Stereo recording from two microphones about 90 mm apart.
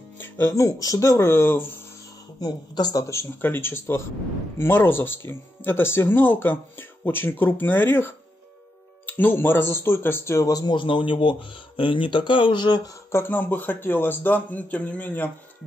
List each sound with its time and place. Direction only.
0.2 s speech: 30° left (ahead or behind)
2.4 s speech: 45° left (ahead or behind)
3.1 s speech: 25° left (ahead or behind); by 12.9 s 55° left (ahead or behind)
13.1 s speech: 20° left (ahead or behind)